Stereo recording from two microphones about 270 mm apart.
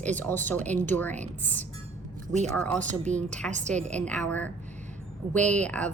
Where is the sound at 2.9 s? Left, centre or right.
Right.